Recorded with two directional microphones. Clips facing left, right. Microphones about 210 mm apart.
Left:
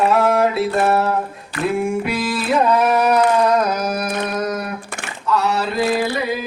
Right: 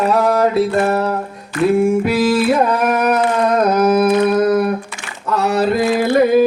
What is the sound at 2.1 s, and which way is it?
Mantra, 50° right (ahead or behind).